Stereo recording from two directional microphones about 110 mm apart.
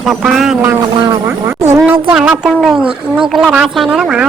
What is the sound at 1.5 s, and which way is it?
Speech, 25° right (ahead or behind).